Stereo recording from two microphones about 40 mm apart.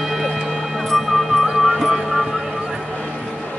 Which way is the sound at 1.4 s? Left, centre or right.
Centre.